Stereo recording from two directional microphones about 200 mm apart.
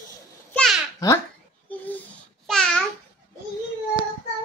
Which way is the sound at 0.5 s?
Centre (ahead or behind).